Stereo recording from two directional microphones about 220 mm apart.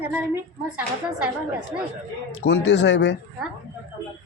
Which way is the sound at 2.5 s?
55° left (ahead or behind).